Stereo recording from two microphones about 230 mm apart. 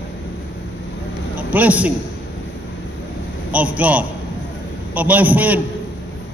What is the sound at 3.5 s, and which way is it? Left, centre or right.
A man's voice, centre.